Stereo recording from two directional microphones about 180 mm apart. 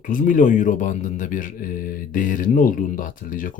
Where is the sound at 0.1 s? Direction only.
45° left (ahead or behind).